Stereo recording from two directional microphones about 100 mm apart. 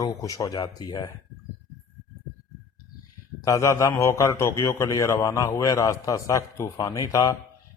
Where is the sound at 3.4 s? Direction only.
35° left (ahead or behind).